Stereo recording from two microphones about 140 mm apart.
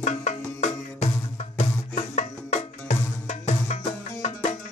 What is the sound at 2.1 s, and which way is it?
Music, 60° left (ahead or behind).